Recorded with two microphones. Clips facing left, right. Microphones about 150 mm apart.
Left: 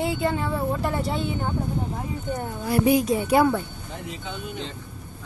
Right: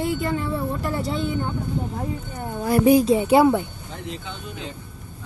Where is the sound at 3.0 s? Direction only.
25° right (ahead or behind).